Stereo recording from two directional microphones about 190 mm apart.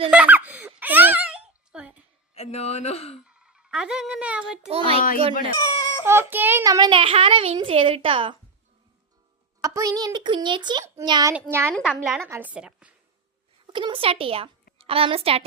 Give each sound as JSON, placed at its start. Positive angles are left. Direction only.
{"t": 0.1, "sound": "giggle", "side_deg": -5}
{"t": 2.3, "sound": "speech", "side_deg": 35}
{"t": 3.2, "sound": "a child's voice", "side_deg": -5}
{"t": 4.7, "sound": "a child's voice", "side_deg": -30}
{"t": 5.5, "sound": "wail", "side_deg": 20}
{"t": 6.1, "sound": "a child's voice", "side_deg": -10}
{"t": 9.6, "sound": "a child's voice", "side_deg": -15}
{"t": 11.7, "sound": "a woman's voice", "side_deg": -5}
{"t": 13.7, "sound": "a child's voice", "side_deg": -25}